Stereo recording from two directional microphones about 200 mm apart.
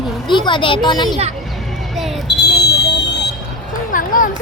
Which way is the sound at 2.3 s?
55° left (ahead or behind).